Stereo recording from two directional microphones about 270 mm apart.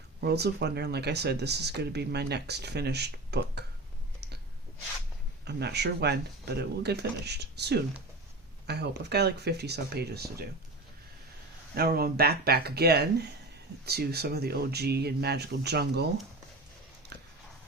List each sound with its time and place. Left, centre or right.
0.2 s speech: right
5.5 s speech: right
11.7 s speech: right
17.1 s a sound: right